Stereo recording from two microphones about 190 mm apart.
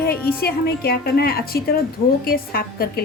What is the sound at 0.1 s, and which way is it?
A woman's voice, 55° left (ahead or behind).